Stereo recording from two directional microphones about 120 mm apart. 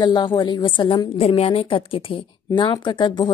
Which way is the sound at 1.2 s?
55° left (ahead or behind).